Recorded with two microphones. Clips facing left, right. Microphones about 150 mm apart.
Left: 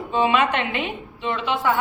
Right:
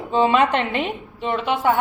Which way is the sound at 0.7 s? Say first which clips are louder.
Right 3 dB; 45° right (ahead or behind).